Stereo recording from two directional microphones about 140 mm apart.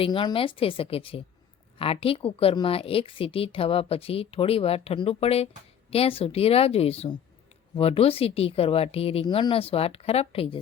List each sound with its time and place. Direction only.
0.0 s a woman's voice: 35° left (ahead or behind)